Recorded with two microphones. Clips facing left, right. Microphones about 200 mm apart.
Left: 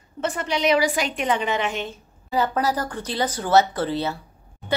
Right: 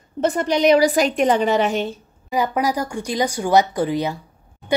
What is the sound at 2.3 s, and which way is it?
Speech, 15° right (ahead or behind).